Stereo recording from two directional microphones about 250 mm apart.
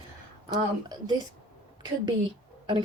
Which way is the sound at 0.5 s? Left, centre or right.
Centre.